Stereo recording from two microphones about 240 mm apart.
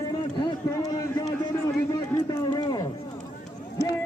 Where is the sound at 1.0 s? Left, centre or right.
Centre.